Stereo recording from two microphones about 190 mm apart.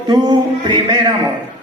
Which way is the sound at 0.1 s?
20° right (ahead or behind).